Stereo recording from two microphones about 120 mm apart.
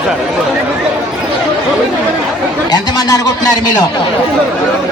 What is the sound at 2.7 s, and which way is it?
Speech, 35° left (ahead or behind).